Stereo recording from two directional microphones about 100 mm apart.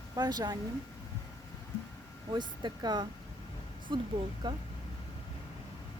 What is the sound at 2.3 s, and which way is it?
Speech, 50° right (ahead or behind).